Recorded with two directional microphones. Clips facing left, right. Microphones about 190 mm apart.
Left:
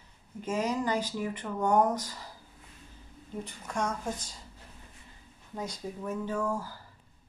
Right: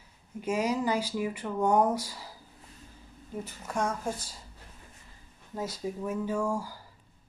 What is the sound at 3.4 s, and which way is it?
Speech, 5° right (ahead or behind).